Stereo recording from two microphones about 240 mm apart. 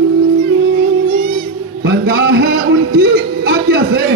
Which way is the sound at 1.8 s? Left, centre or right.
Right.